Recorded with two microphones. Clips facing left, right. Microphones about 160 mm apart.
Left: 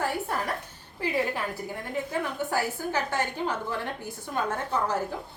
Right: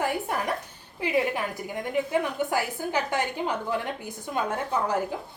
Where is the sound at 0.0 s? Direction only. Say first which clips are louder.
Right 2 dB; 15° right (ahead or behind).